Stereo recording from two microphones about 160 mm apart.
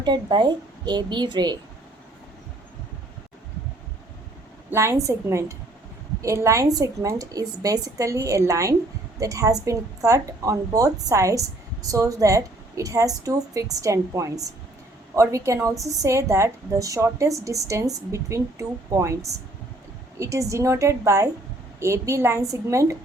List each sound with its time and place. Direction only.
0.0 s a woman's voice: 25° right (ahead or behind)
4.7 s a woman's voice: 15° right (ahead or behind)